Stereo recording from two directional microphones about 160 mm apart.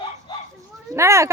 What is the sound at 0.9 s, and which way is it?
Speech, 15° right (ahead or behind).